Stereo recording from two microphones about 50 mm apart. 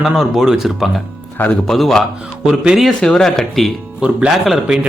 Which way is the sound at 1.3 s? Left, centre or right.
Left.